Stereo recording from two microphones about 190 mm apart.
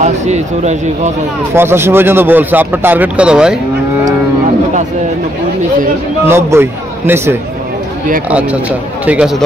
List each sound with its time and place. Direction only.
0.0 s speech: 35° right (ahead or behind)
1.5 s speech: 10° right (ahead or behind)
6.2 s speech: 10° right (ahead or behind)